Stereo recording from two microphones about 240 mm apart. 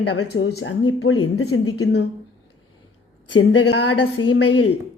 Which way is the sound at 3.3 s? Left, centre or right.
Left.